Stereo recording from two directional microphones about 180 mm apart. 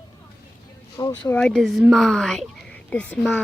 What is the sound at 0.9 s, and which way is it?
Speech, 20° left (ahead or behind).